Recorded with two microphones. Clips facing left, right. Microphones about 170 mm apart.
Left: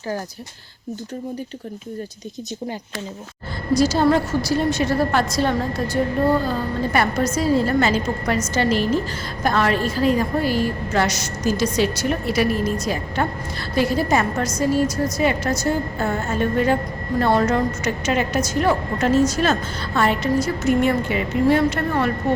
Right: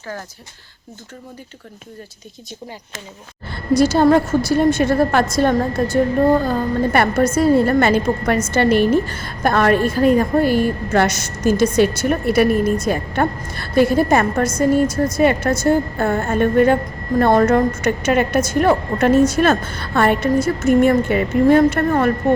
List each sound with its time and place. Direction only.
3.8 s a woman's voice: 55° right (ahead or behind)